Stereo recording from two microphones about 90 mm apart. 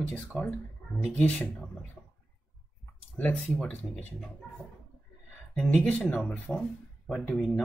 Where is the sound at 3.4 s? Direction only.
5° left (ahead or behind).